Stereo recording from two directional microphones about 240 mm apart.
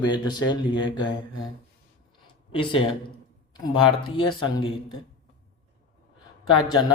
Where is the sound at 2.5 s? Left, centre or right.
Left.